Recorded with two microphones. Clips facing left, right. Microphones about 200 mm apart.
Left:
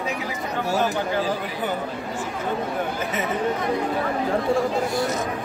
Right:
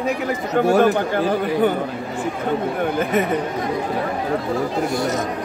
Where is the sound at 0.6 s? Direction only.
55° right (ahead or behind).